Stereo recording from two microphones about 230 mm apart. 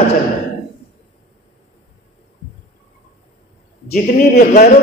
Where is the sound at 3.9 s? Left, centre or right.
Left.